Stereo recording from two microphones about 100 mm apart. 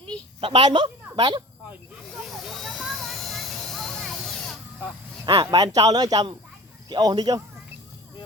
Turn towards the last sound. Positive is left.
turn(degrees=-40)  # may be behind; listen again after turning